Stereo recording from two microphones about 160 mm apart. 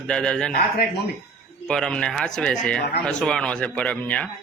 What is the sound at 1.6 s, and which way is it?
A man's voice, 5° left (ahead or behind).